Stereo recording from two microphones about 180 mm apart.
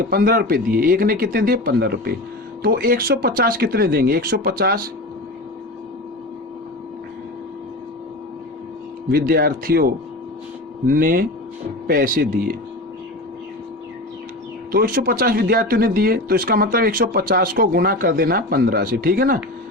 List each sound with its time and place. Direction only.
0.0 s speech: 50° right (ahead or behind)
9.0 s speech: 55° right (ahead or behind)
14.7 s speech: 55° right (ahead or behind)